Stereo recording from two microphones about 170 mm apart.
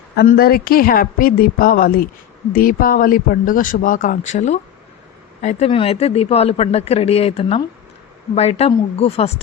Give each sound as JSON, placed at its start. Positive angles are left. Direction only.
{"t": 0.3, "sound": "speech", "side_deg": 60}
{"t": 4.3, "sound": "speech", "side_deg": 45}